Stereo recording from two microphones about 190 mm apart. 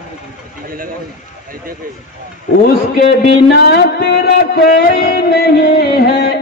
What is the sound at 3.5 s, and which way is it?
Music, 60° left (ahead or behind).